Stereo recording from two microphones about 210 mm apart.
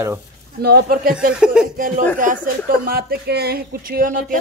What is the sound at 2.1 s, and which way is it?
Speech, 40° right (ahead or behind).